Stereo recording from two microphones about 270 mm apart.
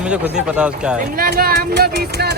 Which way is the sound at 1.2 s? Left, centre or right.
Right.